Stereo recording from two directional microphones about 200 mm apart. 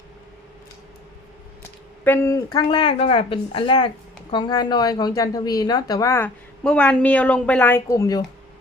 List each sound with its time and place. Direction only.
2.0 s speech: 15° left (ahead or behind)